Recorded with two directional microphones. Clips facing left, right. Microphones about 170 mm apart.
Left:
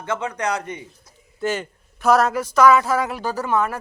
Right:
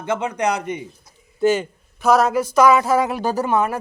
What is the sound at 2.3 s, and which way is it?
A man's voice, 15° right (ahead or behind).